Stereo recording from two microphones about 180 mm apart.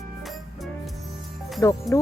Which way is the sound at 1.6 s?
15° left (ahead or behind).